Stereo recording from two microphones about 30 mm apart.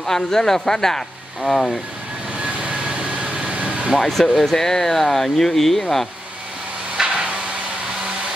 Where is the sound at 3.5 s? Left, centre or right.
Right.